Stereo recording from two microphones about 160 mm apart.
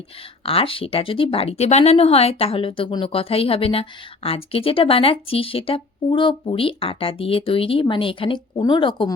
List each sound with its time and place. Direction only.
0.4 s speech: 35° left (ahead or behind)